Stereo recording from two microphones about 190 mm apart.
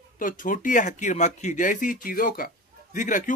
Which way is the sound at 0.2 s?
45° left (ahead or behind).